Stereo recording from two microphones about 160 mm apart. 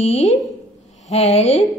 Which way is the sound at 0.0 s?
40° left (ahead or behind).